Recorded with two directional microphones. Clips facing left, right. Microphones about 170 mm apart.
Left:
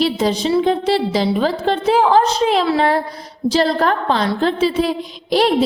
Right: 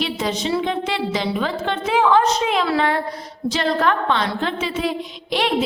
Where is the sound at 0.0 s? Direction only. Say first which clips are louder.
Left 6 dB; 35° left (ahead or behind).